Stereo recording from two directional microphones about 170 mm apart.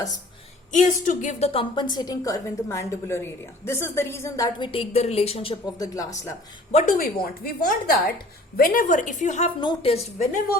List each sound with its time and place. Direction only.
0.7 s a woman's voice: 50° left (ahead or behind); by 5.5 s 35° left (ahead or behind)
5.8 s a woman's voice: 20° left (ahead or behind)
6.9 s a woman's voice: 60° left (ahead or behind); by 9.5 s 45° left (ahead or behind)
9.6 s a woman's voice: 30° left (ahead or behind)